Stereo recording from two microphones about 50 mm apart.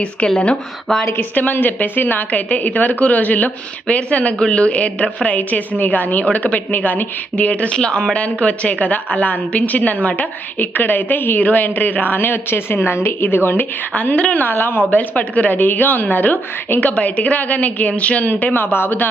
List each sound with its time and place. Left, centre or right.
0.3 s a woman's voice: left
0.9 s a woman's voice: centre
1.4 s a woman's voice: left
7.8 s a woman's voice: centre; by 13.7 s left
13.9 s a woman's voice: left
14.5 s speech: left
14.8 s a woman's voice: left
16.8 s a woman's voice: left